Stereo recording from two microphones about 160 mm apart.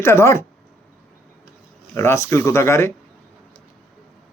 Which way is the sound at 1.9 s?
15° left (ahead or behind).